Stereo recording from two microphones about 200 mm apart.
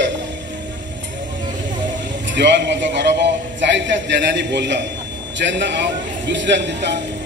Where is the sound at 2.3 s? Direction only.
60° right (ahead or behind).